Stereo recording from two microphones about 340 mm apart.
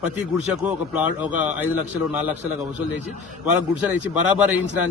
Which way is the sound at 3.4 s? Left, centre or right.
Centre.